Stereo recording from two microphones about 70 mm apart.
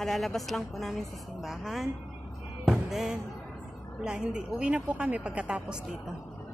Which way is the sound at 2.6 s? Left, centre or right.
Centre.